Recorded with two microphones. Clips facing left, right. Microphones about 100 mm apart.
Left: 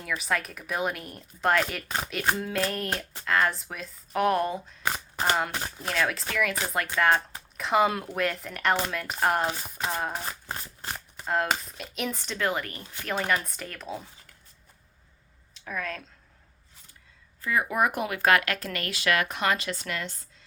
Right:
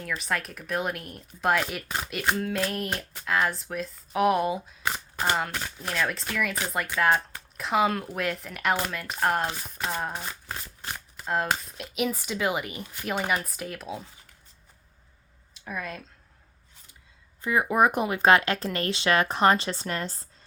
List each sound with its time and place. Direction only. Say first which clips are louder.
0.0 s speech: left 1 dB; 5° left (ahead or behind)
5.8 s speech: left 1 dB; centre (ahead or behind)
11.3 s speech: even; centre (ahead or behind)
15.5 s speech: left 1 dB; 10° right (ahead or behind)
17.4 s speech: right 3 dB; 20° right (ahead or behind)